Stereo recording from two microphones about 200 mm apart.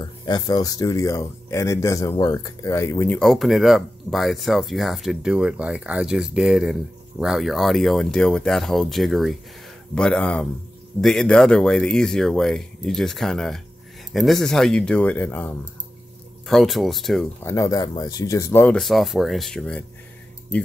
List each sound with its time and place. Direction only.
0.0 s speech: 20° left (ahead or behind); by 17.2 s centre (ahead or behind)
17.4 s speech: 15° left (ahead or behind)